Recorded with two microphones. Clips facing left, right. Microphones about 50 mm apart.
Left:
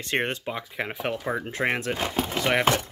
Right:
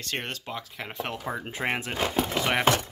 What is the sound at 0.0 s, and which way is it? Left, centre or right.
Speech, left.